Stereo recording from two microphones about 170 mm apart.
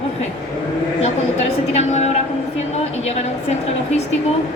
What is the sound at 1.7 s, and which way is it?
Speech, 40° left (ahead or behind).